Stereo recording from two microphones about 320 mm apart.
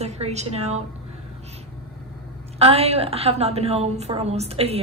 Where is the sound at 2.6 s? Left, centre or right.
Centre.